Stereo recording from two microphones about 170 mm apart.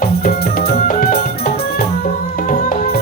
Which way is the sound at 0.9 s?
55° left (ahead or behind).